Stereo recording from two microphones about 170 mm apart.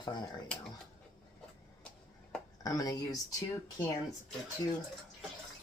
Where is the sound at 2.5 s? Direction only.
20° left (ahead or behind).